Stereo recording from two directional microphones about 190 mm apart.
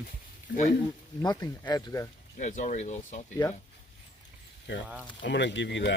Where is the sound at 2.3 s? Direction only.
40° left (ahead or behind).